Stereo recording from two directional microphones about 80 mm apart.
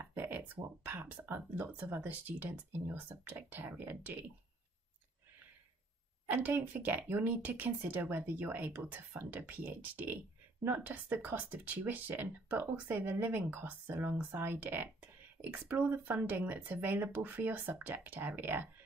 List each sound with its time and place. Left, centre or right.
0.0 s a sound: right
0.8 s speech: right
6.3 s speech: right